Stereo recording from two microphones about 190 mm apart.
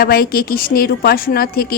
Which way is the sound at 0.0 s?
50° left (ahead or behind).